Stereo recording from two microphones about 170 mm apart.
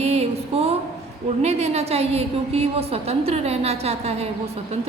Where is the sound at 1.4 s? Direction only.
40° right (ahead or behind).